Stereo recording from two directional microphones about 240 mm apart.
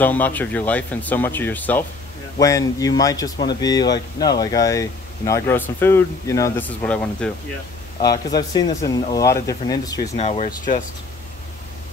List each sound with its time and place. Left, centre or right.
0.0 s speech: centre
8.0 s speech: centre
10.1 s speech: left